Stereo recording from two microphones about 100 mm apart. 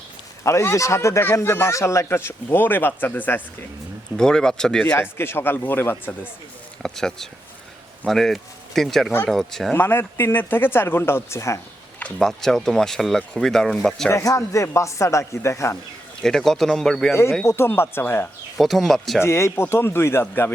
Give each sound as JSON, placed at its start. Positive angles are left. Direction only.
{"t": 0.4, "sound": "speech", "side_deg": 30}
{"t": 4.2, "sound": "speech", "side_deg": 5}
{"t": 4.9, "sound": "speech", "side_deg": 25}
{"t": 6.8, "sound": "speech", "side_deg": 5}
{"t": 9.7, "sound": "speech", "side_deg": 20}
{"t": 12.2, "sound": "speech", "side_deg": 5}
{"t": 14.1, "sound": "speech", "side_deg": 30}
{"t": 16.2, "sound": "speech", "side_deg": 5}
{"t": 17.4, "sound": "speech", "side_deg": 25}
{"t": 18.5, "sound": "speech", "side_deg": 0}
{"t": 19.2, "sound": "speech", "side_deg": 25}